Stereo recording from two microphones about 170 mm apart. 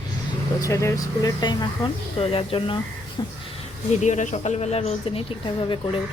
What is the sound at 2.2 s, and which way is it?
Speech, 35° left (ahead or behind).